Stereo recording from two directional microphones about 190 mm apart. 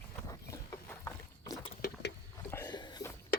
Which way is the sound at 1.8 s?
65° left (ahead or behind).